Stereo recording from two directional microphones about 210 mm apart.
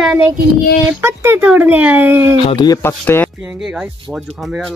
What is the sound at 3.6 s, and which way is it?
Speech, 5° right (ahead or behind).